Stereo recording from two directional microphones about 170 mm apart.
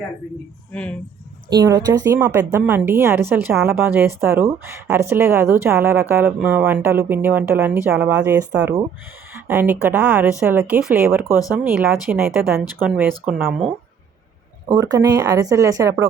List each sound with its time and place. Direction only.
0.7 s speech: 10° left (ahead or behind)
1.5 s a woman's voice: 20° right (ahead or behind); by 11.9 s 5° right (ahead or behind)
13.0 s a woman's voice: 10° right (ahead or behind)
14.7 s speech: 20° right (ahead or behind)